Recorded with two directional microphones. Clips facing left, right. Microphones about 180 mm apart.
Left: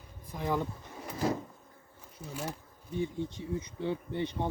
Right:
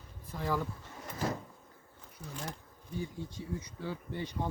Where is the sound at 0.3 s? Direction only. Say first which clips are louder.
Left 2 dB; 20° left (ahead or behind).